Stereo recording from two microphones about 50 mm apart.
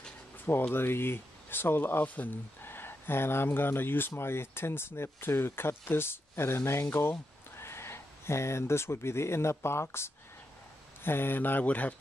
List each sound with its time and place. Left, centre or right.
0.5 s speech: left
2.6 s speech: left
11.1 s speech: left